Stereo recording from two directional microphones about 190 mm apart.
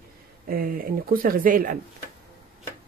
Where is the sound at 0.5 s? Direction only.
50° right (ahead or behind).